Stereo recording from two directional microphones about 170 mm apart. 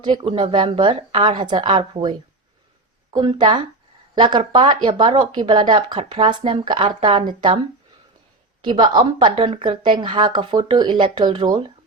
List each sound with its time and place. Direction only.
0.0 s speech: 25° right (ahead or behind)
8.6 s speech: 25° right (ahead or behind)